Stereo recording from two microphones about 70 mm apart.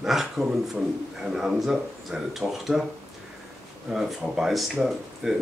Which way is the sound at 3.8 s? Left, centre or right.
Centre.